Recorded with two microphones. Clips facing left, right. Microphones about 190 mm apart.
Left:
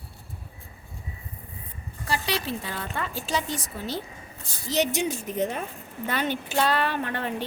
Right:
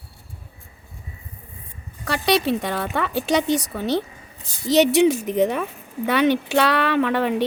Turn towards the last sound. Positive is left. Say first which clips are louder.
# right 10 dB
turn(degrees=-70)  # may be behind; listen again after turning